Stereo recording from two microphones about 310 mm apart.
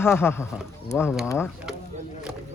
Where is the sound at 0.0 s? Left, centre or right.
Centre.